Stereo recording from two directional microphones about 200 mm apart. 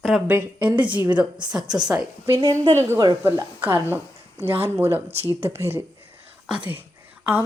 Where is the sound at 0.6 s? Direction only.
25° right (ahead or behind).